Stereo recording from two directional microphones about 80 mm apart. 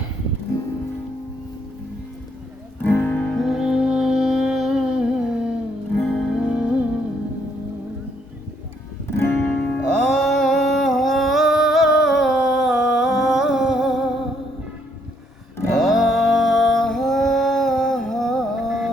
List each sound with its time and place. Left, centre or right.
2.8 s music: left
3.3 s music: centre
6.0 s music: centre
9.0 s music: left
9.9 s a sound: centre
15.7 s music: centre